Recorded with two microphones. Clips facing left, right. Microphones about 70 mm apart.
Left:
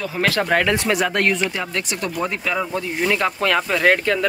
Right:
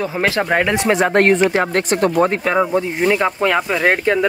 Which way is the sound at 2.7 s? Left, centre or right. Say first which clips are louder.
Right 5 dB; right.